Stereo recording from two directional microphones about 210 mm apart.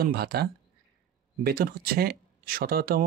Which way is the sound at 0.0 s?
45° right (ahead or behind).